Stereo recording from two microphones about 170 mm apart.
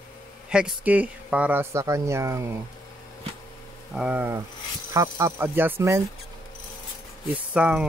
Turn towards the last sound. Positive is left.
turn(degrees=-5)  # may be behind; listen again after turning